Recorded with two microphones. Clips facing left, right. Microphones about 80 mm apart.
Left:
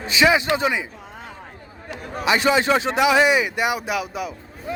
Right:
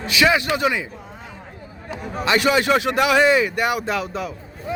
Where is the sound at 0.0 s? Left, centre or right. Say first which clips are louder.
Even; left.